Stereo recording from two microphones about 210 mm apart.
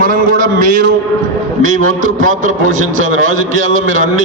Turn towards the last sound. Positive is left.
turn(degrees=-40)  # may be behind; listen again after turning